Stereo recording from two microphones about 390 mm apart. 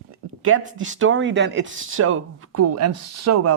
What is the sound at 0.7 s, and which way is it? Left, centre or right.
Speech, right.